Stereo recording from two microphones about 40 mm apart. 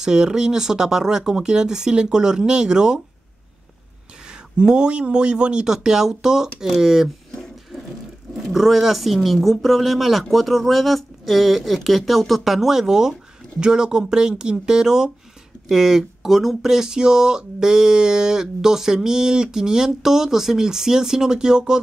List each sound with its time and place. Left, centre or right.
0.0 s speech: centre
4.3 s speech: right
8.5 s speech: centre